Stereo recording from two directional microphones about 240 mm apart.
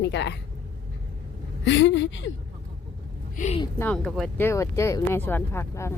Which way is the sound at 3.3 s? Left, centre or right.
Left.